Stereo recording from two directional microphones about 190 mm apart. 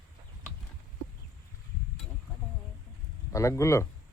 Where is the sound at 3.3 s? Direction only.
15° left (ahead or behind).